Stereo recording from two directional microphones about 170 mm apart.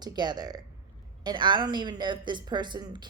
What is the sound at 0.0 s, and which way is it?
Speech, 25° right (ahead or behind).